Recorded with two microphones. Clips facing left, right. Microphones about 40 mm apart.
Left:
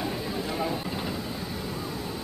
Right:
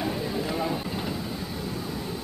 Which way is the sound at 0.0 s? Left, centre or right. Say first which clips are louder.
Right 2 dB; centre.